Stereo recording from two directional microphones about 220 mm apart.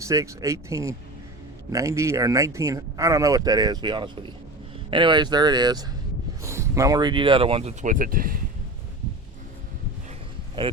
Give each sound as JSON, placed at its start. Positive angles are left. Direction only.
{"t": 0.0, "sound": "speech", "side_deg": -15}